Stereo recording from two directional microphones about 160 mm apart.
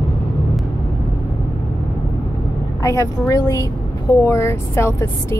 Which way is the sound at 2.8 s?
20° left (ahead or behind).